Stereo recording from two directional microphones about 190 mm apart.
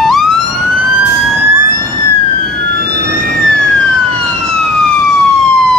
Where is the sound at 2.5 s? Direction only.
55° right (ahead or behind); by 4.5 s 35° right (ahead or behind).